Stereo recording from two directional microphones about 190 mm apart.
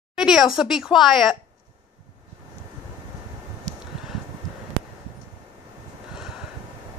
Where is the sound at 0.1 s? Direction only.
5° right (ahead or behind).